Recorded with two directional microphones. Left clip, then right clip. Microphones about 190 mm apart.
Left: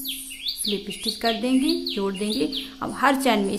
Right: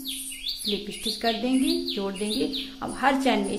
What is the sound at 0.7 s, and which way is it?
A woman's voice, 15° left (ahead or behind).